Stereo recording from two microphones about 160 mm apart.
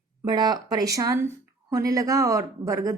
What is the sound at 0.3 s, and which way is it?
A woman's voice, 25° right (ahead or behind).